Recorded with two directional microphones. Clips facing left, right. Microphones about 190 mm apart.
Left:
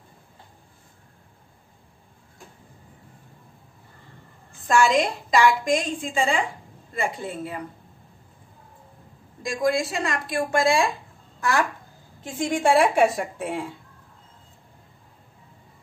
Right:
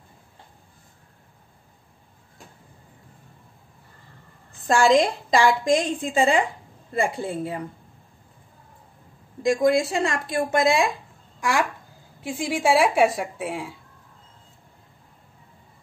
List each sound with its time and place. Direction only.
4.6 s a woman's voice: 30° right (ahead or behind)
9.4 s a woman's voice: 25° right (ahead or behind)
12.2 s a woman's voice: 10° right (ahead or behind)